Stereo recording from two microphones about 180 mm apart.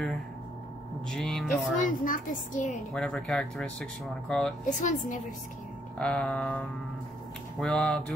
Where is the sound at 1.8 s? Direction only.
50° left (ahead or behind).